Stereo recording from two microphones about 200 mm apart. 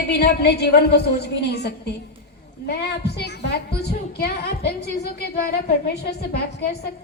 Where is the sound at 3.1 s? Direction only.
60° left (ahead or behind).